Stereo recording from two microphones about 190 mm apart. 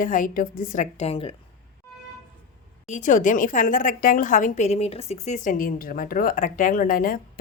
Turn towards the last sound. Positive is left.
turn(degrees=50)  # may be behind; listen again after turning